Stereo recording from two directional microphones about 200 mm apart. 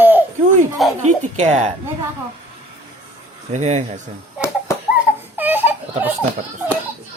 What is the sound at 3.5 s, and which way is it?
Speech, 35° right (ahead or behind).